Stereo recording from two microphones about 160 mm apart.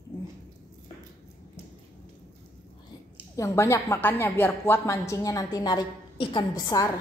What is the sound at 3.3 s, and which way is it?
A woman's voice, 20° left (ahead or behind).